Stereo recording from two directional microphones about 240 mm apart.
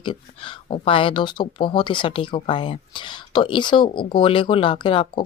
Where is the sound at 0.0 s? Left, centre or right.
Left.